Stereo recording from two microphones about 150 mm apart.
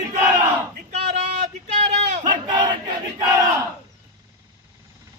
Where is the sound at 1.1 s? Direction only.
50° right (ahead or behind).